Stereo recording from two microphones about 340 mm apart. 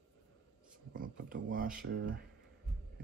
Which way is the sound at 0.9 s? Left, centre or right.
Right.